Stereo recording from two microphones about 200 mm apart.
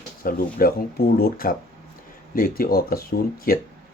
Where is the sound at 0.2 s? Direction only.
45° left (ahead or behind).